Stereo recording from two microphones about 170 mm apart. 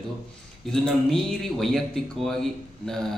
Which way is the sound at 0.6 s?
Centre (ahead or behind).